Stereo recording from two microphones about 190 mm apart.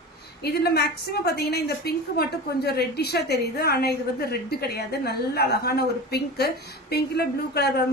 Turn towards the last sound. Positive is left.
turn(degrees=55)  # may be behind; listen again after turning